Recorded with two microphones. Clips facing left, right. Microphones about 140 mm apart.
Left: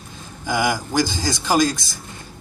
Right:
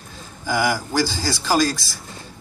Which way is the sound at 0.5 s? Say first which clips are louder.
Even; 20° left (ahead or behind).